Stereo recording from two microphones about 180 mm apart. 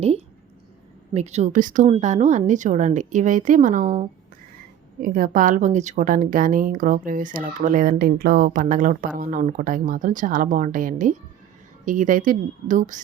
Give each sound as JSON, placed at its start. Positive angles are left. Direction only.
{"t": 1.1, "sound": "a woman's voice", "side_deg": -40}